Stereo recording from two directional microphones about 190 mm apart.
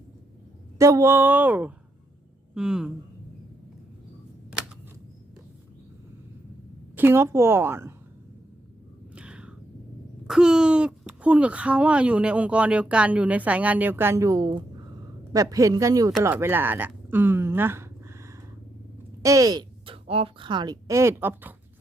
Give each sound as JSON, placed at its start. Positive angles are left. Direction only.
{"t": 0.8, "sound": "speech", "side_deg": -15}
{"t": 6.9, "sound": "speech", "side_deg": -10}
{"t": 9.1, "sound": "a sound", "side_deg": -5}
{"t": 10.2, "sound": "speech", "side_deg": -5}